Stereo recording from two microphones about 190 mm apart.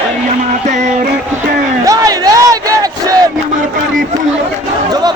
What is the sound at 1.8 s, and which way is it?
Battle cry, 20° right (ahead or behind).